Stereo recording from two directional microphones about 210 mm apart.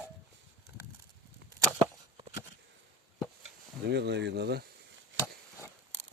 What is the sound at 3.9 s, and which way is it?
Speech, 55° right (ahead or behind).